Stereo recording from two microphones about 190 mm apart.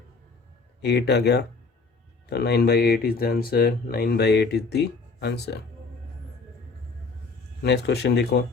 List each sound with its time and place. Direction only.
0.8 s speech: 60° left (ahead or behind)
7.6 s speech: 60° left (ahead or behind)